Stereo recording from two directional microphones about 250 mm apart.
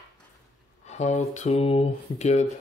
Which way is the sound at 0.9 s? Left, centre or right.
Left.